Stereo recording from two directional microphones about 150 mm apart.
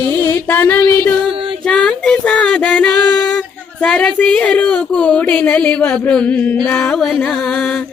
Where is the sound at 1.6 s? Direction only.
5° left (ahead or behind).